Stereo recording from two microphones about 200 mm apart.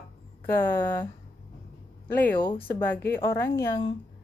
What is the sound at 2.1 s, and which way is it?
Speech, 10° left (ahead or behind).